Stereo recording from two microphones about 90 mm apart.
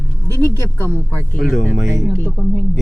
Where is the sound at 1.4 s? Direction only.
Centre (ahead or behind).